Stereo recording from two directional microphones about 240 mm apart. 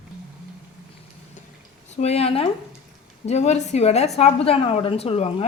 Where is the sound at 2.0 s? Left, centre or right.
Left.